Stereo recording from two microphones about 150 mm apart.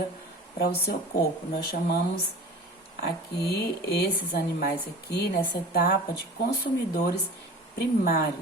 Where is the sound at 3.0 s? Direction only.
90° left.